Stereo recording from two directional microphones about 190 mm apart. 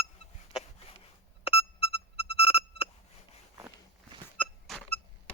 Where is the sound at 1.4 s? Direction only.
30° left (ahead or behind).